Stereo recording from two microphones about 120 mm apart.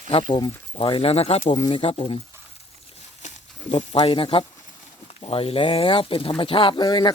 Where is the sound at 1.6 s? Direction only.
50° left (ahead or behind).